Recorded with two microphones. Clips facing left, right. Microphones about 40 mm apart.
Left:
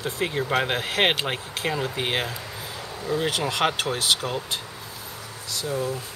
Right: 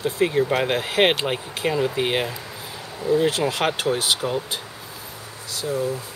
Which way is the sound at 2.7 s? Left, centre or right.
Centre.